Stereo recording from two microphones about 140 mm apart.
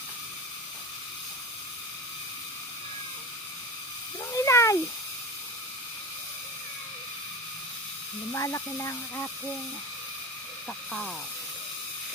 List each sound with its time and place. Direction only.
4.3 s cat: 20° left (ahead or behind)
8.3 s speech: 20° left (ahead or behind)
10.9 s speech: 10° left (ahead or behind)